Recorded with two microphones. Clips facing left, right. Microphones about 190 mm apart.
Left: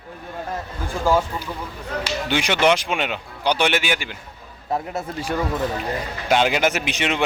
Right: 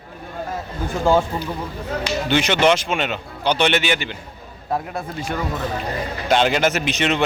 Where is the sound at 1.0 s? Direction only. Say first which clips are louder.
Right 2 dB; 25° right (ahead or behind).